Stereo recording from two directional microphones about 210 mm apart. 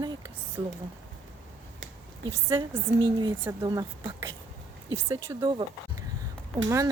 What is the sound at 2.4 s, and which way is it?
A woman's voice, 25° right (ahead or behind).